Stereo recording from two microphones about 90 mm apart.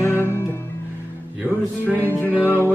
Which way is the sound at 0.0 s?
30° left (ahead or behind).